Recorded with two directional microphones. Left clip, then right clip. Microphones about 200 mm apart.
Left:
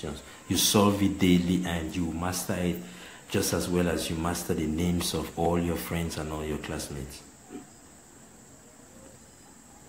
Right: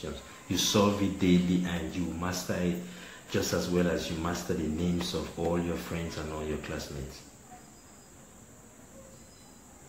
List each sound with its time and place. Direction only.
0.5 s speech: 35° left (ahead or behind)